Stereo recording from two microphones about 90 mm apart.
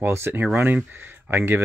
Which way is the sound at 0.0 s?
25° right (ahead or behind).